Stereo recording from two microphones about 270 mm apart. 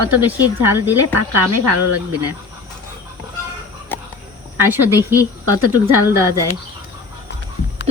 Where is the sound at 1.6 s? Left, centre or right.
Right.